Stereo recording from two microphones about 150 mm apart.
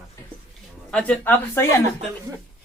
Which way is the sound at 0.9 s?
10° left (ahead or behind).